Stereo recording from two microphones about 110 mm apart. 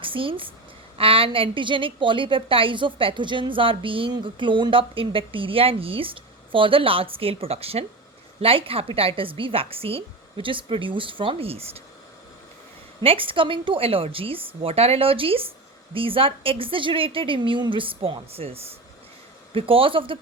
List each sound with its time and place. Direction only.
0.0 s a woman's voice: 50° right (ahead or behind)
13.0 s a woman's voice: 55° right (ahead or behind)